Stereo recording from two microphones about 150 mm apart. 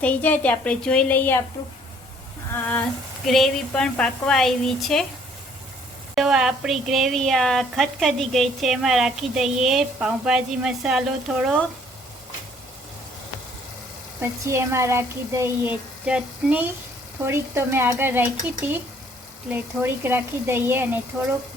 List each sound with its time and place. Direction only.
0.0 s a woman's voice: 10° left (ahead or behind)
3.2 s a woman's voice: centre (ahead or behind)
6.1 s a woman's voice: 5° right (ahead or behind)
14.2 s a woman's voice: 15° right (ahead or behind)